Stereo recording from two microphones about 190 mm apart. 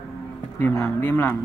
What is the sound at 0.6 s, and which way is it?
Speech, 10° left (ahead or behind).